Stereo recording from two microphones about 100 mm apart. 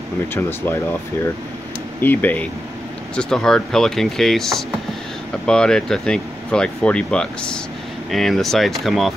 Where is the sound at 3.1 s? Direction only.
5° left (ahead or behind).